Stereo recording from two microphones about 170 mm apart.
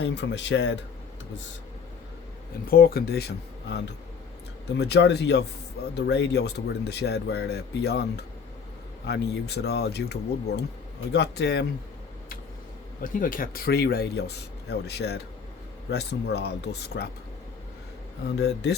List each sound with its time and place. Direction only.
0.0 s speech: 90° left
2.6 s speech: 60° left (ahead or behind); by 11.6 s 80° left
13.0 s speech: 50° left (ahead or behind); by 17.1 s 75° left (ahead or behind)
18.3 s speech: 80° left